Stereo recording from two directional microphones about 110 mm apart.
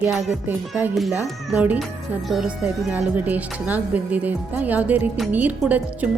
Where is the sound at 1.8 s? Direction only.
Centre (ahead or behind).